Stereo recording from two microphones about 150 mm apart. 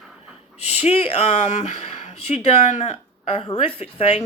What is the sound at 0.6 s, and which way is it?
Speech, 45° left (ahead or behind).